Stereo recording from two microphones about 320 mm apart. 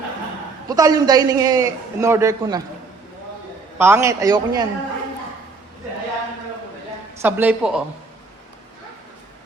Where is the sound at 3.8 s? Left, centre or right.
Centre.